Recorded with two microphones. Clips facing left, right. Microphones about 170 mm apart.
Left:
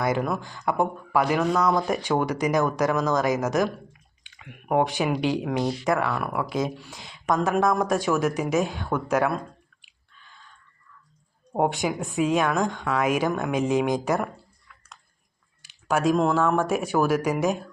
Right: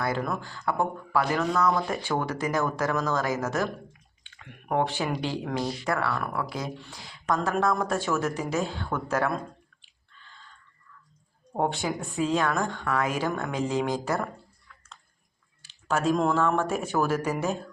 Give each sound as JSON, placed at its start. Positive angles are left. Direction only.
{"t": 0.0, "sound": "speech", "side_deg": 15}
{"t": 9.8, "sound": "drip", "side_deg": 10}
{"t": 11.5, "sound": "speech", "side_deg": 15}
{"t": 15.6, "sound": "a sound", "side_deg": 15}
{"t": 16.1, "sound": "speech", "side_deg": 5}